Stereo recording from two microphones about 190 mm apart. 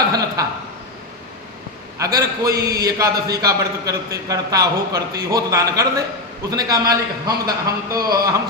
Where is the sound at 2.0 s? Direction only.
20° right (ahead or behind).